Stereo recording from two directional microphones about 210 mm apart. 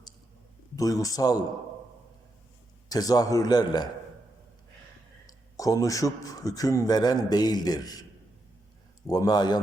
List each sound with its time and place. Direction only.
0.8 s speech: 15° left (ahead or behind)
2.9 s speech: 15° left (ahead or behind)
5.2 s speech: 15° left (ahead or behind)
9.0 s a man's voice: 20° left (ahead or behind)